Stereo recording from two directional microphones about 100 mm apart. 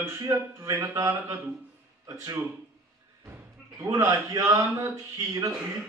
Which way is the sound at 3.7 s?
35° right (ahead or behind).